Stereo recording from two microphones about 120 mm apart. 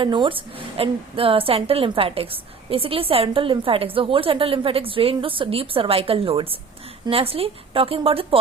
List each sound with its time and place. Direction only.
0.0 s a woman's voice: 45° right (ahead or behind)